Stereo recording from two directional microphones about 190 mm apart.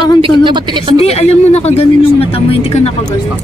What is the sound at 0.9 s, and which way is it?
Speech, 35° left (ahead or behind).